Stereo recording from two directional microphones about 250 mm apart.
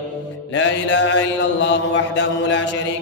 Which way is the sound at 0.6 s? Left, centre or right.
Left.